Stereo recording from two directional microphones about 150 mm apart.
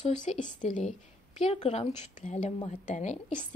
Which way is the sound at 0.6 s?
55° left (ahead or behind).